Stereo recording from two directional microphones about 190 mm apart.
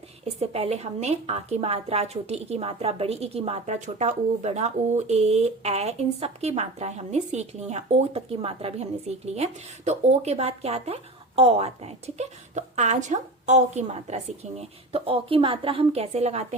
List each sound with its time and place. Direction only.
0.3 s speech: 35° right (ahead or behind)